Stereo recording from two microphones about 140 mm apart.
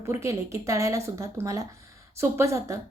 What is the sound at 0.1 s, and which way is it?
A woman's voice, 20° right (ahead or behind).